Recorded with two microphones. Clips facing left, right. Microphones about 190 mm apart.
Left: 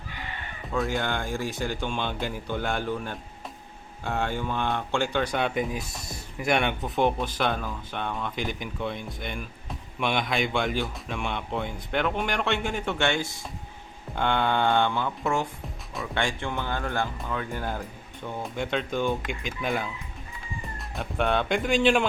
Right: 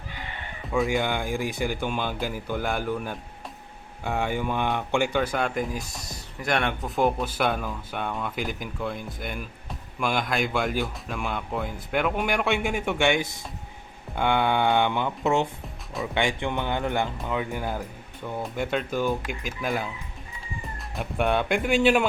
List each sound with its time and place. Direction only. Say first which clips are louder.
0.7 s speech: right 3 dB; 5° right (ahead or behind)
20.9 s speech: right 1 dB; 5° right (ahead or behind)